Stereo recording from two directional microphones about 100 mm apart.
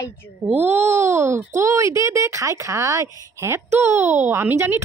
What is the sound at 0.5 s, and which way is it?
A child's voice, 25° right (ahead or behind).